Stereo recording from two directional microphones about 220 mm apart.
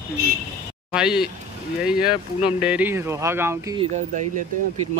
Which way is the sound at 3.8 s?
35° right (ahead or behind).